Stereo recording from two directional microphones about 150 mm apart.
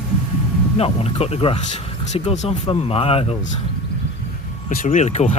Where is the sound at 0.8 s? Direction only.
40° left (ahead or behind).